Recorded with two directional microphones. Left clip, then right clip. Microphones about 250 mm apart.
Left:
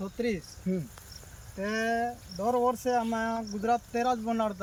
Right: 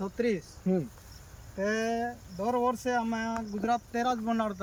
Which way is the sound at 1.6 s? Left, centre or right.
Centre.